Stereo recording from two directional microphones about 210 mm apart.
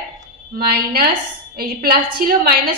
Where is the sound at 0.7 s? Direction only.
45° right (ahead or behind).